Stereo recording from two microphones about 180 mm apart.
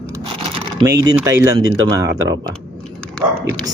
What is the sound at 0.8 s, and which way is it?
Speech, 20° right (ahead or behind).